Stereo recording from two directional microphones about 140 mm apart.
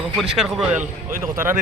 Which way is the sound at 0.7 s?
60° right (ahead or behind).